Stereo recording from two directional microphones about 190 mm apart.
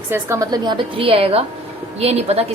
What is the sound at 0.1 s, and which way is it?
A woman's voice, 15° right (ahead or behind).